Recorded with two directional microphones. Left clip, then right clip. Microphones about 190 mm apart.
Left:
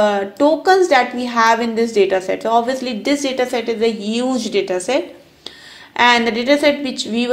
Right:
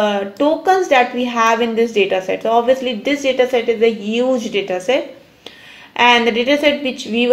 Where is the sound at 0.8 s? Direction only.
20° left (ahead or behind).